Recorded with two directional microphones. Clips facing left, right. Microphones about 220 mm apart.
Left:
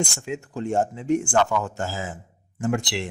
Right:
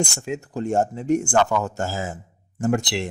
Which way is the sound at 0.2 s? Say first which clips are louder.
Right 2 dB; 40° right (ahead or behind).